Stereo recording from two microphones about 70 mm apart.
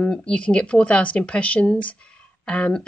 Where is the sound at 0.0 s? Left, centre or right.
Centre.